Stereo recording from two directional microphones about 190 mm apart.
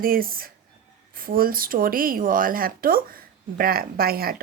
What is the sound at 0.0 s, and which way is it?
A woman's voice, 50° right (ahead or behind).